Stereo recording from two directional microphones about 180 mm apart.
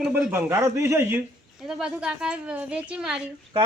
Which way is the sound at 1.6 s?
5° right (ahead or behind).